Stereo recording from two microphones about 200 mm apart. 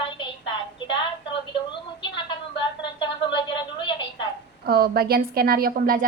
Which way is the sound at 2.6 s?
25° left (ahead or behind).